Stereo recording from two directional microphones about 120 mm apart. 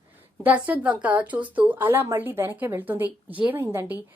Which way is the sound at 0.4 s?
15° right (ahead or behind).